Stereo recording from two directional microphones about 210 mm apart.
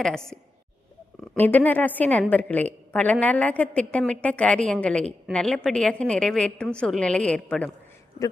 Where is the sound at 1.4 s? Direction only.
10° left (ahead or behind).